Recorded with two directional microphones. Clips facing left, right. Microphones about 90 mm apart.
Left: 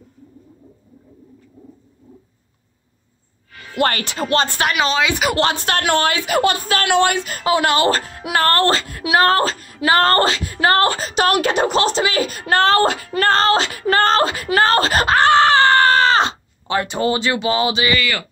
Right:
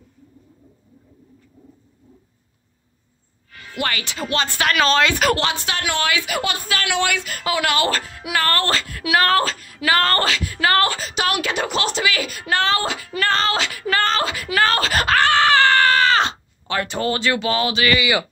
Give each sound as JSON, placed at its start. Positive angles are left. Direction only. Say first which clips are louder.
{"t": 3.7, "sound": "speech", "louder": "left 6 dB", "side_deg": 45}
{"t": 4.6, "sound": "speech", "louder": "right 1 dB", "side_deg": 15}
{"t": 5.4, "sound": "a woman's voice", "louder": "left 5 dB", "side_deg": 45}
{"t": 17.9, "sound": "speech", "louder": "right 2 dB", "side_deg": -15}